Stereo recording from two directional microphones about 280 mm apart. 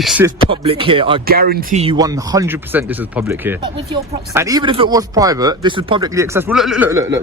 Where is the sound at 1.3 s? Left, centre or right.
Right.